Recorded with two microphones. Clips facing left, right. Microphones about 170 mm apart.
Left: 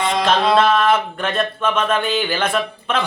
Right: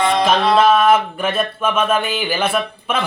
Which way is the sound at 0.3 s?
10° right (ahead or behind).